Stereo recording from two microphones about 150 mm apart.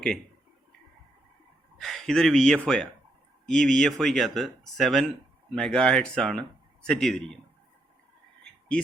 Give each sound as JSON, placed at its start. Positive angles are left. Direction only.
{"t": 1.8, "sound": "speech", "side_deg": 5}